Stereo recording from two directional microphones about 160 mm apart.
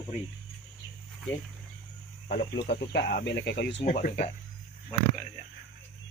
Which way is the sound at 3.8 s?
45° left (ahead or behind).